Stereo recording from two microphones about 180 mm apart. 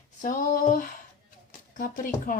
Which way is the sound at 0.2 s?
50° left (ahead or behind).